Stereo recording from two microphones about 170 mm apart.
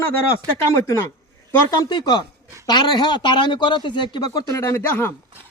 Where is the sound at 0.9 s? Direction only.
15° left (ahead or behind).